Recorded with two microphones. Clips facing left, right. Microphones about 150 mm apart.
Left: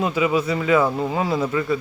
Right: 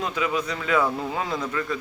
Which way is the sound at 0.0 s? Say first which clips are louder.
Left 6 dB; 10° left (ahead or behind).